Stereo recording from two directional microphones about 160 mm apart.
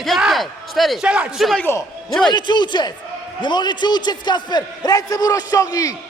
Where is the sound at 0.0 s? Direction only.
Centre (ahead or behind).